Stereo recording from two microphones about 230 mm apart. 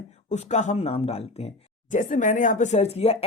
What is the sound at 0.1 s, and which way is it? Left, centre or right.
Speech, left.